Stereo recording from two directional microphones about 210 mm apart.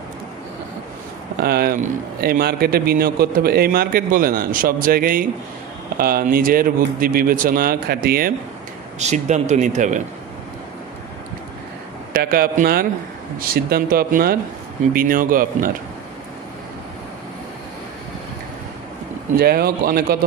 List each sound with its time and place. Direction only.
1.4 s a man's voice: 45° right (ahead or behind)
9.0 s speech: 35° right (ahead or behind)
12.1 s a man's voice: 45° right (ahead or behind)
19.3 s a man's voice: 50° right (ahead or behind)